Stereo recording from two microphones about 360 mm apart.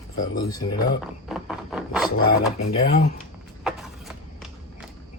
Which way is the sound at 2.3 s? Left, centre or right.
Left.